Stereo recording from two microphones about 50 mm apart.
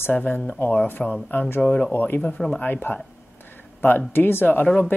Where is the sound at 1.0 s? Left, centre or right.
Centre.